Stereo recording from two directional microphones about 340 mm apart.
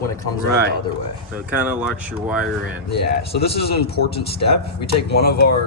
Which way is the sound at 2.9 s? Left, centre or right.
Left.